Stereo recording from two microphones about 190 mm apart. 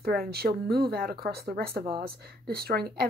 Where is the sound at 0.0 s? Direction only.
55° right (ahead or behind).